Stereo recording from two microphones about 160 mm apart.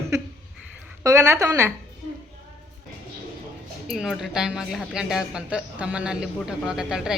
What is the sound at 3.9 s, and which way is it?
A woman's voice, centre (ahead or behind).